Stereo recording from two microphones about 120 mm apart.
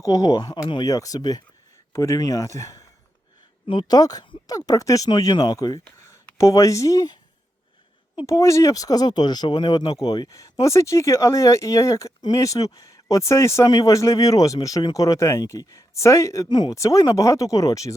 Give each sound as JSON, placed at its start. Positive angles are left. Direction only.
{"t": 0.0, "sound": "speech", "side_deg": 25}
{"t": 3.7, "sound": "speech", "side_deg": 35}
{"t": 8.3, "sound": "speech", "side_deg": 25}
{"t": 16.5, "sound": "speech", "side_deg": 35}